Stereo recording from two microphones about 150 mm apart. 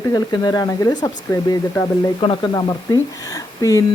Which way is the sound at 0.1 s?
25° left (ahead or behind).